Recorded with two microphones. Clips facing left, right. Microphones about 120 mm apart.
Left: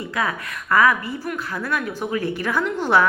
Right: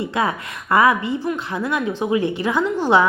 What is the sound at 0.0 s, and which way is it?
A woman's voice, 25° right (ahead or behind).